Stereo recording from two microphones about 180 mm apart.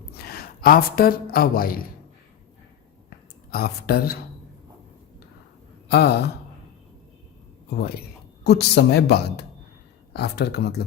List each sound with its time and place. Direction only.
0.1 s speech: 60° left (ahead or behind)
3.5 s speech: 60° left (ahead or behind)
5.9 s speech: 60° left (ahead or behind)
7.8 s speech: 60° left (ahead or behind)